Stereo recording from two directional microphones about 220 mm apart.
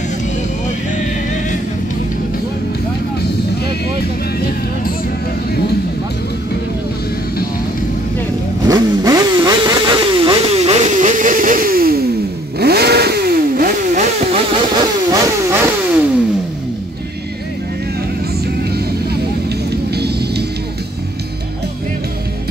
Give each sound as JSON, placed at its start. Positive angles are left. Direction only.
{"t": 8.6, "sound": "vehicle", "side_deg": -15}
{"t": 19.9, "sound": "music", "side_deg": -50}